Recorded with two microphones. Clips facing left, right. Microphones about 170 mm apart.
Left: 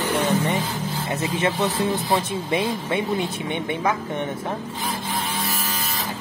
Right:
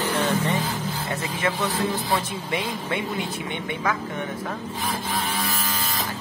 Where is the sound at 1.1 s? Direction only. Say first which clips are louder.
Left 4 dB; 20° left (ahead or behind).